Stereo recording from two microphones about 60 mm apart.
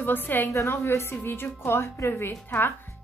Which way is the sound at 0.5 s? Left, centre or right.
Left.